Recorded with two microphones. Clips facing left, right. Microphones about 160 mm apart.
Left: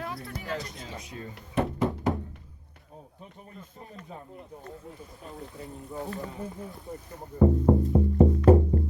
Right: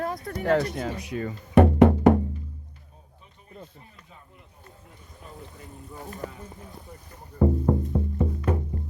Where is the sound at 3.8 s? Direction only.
40° left (ahead or behind).